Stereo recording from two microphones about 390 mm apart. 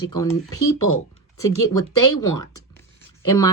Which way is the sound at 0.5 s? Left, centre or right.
Left.